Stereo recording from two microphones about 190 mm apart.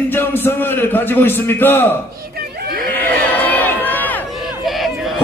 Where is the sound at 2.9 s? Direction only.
10° left (ahead or behind).